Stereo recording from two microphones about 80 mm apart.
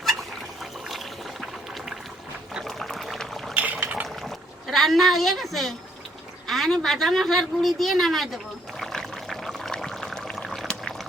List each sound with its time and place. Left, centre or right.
0.9 s water: centre
2.6 s pour: centre
3.5 s liquid: right
4.0 s a sound: centre
6.5 s a woman's voice: centre
8.8 s pour: centre